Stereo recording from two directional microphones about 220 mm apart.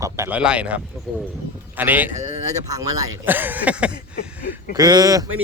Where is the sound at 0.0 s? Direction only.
10° right (ahead or behind).